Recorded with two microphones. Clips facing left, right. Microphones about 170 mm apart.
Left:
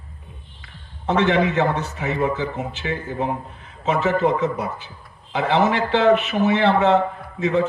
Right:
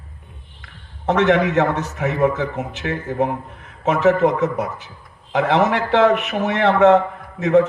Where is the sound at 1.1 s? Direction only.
70° right (ahead or behind).